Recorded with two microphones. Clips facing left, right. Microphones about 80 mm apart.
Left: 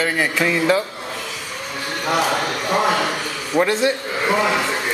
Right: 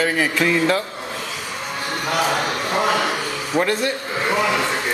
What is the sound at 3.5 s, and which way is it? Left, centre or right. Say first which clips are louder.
Speech: left 2 dB; right.